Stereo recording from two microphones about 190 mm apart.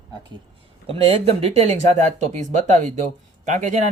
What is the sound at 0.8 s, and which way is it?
Speech, 30° right (ahead or behind).